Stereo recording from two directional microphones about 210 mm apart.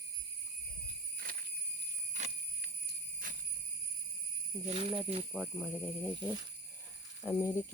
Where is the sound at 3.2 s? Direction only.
40° right (ahead or behind).